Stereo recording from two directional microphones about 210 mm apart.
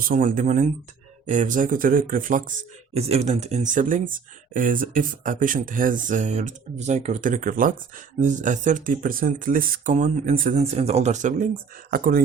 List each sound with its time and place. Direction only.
0.1 s speech: 40° right (ahead or behind)